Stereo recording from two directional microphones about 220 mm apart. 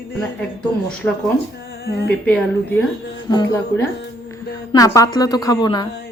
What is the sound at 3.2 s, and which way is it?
Speech, 20° left (ahead or behind).